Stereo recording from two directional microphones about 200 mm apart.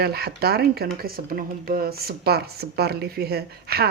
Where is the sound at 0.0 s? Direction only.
50° right (ahead or behind).